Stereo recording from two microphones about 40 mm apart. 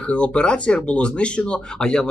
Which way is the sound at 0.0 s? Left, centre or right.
Left.